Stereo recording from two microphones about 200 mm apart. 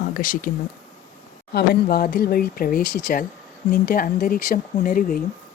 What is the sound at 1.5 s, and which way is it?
A woman's voice, 50° left (ahead or behind).